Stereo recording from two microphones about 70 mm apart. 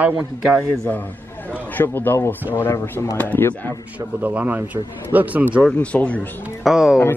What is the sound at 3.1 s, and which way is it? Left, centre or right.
Speech, left.